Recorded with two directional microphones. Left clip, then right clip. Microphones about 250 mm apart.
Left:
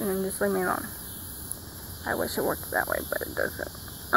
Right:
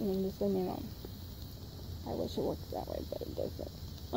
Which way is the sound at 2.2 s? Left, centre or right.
Left.